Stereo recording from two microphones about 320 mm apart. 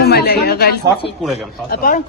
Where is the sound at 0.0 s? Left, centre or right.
Left.